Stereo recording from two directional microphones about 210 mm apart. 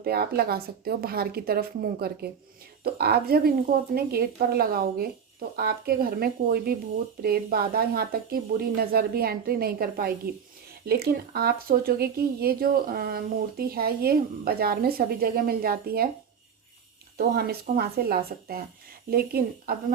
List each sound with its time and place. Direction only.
0.0 s speech: 45° right (ahead or behind)
17.2 s speech: 50° right (ahead or behind)